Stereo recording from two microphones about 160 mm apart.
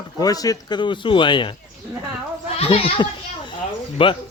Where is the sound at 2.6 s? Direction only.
35° left (ahead or behind).